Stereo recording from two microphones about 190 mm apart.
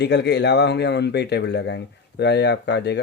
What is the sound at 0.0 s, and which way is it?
Speech, 65° left (ahead or behind).